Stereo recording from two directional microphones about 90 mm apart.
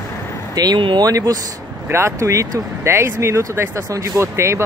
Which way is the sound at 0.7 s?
70° right (ahead or behind).